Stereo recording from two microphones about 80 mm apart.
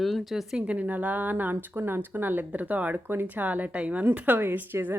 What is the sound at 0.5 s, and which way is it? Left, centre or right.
Speech, centre.